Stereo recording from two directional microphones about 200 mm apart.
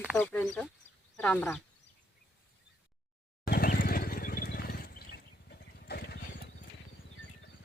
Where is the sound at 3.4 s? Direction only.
45° left (ahead or behind).